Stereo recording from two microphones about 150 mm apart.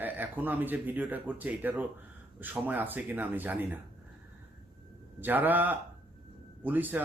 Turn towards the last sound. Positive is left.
turn(degrees=-10)  # may be behind; listen again after turning